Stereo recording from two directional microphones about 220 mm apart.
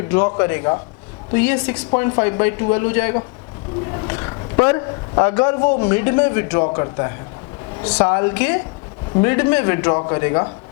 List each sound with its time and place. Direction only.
0.3 s speech: 15° left (ahead or behind)
4.0 s a sound: 20° left (ahead or behind)
5.8 s a man's voice: 15° left (ahead or behind)